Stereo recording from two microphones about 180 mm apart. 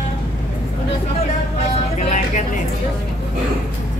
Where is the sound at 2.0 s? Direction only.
40° left (ahead or behind).